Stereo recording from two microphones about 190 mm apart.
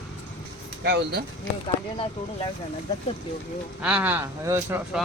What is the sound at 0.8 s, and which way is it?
Speech, 60° right (ahead or behind).